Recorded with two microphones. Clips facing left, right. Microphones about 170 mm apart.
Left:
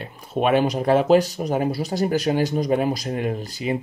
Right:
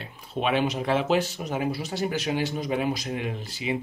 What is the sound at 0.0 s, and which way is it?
Speech, 45° left (ahead or behind).